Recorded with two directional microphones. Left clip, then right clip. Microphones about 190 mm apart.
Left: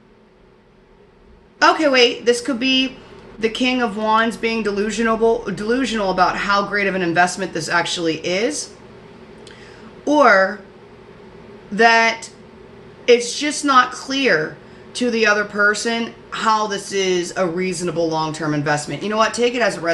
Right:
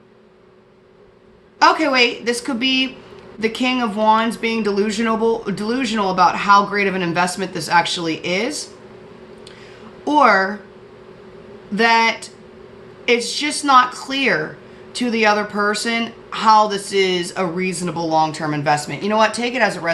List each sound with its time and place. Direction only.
1.6 s speech: 40° right (ahead or behind)
3.4 s speech: 40° right (ahead or behind)
10.0 s a woman's voice: 40° right (ahead or behind)
11.7 s speech: 45° right (ahead or behind)
13.1 s speech: 40° right (ahead or behind)